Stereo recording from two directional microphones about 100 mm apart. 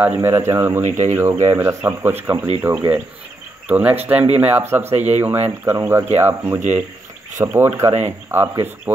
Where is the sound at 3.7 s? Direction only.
15° right (ahead or behind).